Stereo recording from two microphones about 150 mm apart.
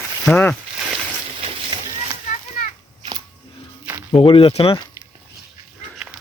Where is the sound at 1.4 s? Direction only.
35° right (ahead or behind).